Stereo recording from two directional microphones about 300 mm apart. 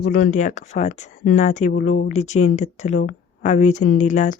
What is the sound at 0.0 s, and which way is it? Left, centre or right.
A woman's voice, left.